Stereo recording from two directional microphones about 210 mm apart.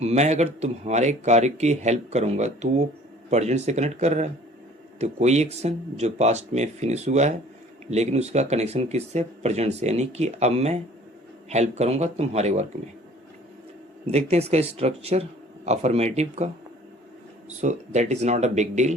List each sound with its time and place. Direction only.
0.0 s speech: 30° right (ahead or behind)
14.1 s speech: 30° right (ahead or behind)
17.6 s speech: 35° right (ahead or behind)